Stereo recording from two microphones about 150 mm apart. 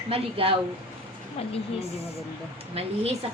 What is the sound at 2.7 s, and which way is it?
Speech, 45° right (ahead or behind).